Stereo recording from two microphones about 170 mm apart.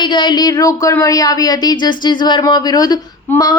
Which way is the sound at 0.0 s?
25° left (ahead or behind).